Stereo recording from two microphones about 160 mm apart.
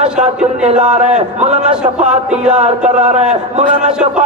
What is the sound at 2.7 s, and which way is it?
A man's voice, 45° right (ahead or behind).